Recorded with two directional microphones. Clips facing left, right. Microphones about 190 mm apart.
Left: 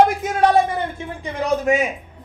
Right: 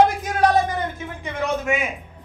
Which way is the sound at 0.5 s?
30° left (ahead or behind).